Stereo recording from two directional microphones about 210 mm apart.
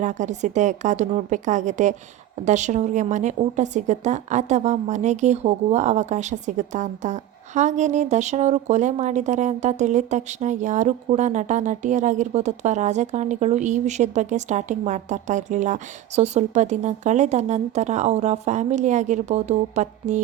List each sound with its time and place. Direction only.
0.0 s a woman's voice: 35° right (ahead or behind)